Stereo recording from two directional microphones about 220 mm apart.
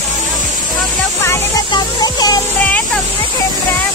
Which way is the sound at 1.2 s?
15° left (ahead or behind).